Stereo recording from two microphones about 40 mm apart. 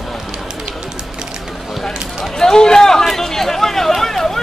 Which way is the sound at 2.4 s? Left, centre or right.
Centre.